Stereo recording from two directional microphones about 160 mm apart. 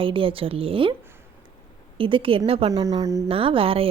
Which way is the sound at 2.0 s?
35° right (ahead or behind).